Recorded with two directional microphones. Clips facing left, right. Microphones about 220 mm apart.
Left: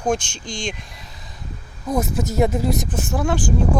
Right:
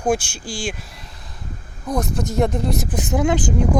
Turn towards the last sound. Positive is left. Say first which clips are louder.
# right 2 dB
turn(degrees=-20)  # may be behind; listen again after turning